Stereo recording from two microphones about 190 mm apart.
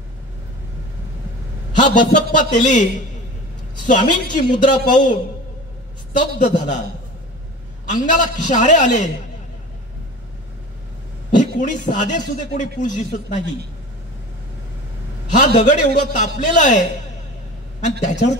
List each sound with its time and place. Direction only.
1.8 s a man's voice: 40° left (ahead or behind)
3.8 s a man's voice: 40° left (ahead or behind)
6.1 s a man's voice: 40° left (ahead or behind)
7.9 s a man's voice: 40° left (ahead or behind)
11.3 s a man's voice: 40° left (ahead or behind)
15.3 s a man's voice: 40° left (ahead or behind)
18.0 s a man's voice: 40° left (ahead or behind)